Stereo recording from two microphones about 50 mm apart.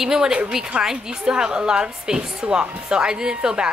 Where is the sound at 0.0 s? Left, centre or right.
Centre.